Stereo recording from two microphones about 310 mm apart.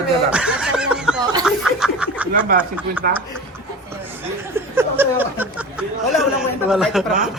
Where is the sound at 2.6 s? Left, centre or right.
Centre.